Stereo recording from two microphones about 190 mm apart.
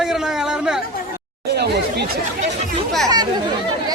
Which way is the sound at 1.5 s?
60° right (ahead or behind).